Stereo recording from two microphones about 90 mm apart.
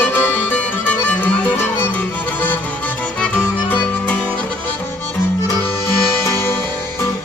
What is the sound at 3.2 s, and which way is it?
Music, 15° left (ahead or behind).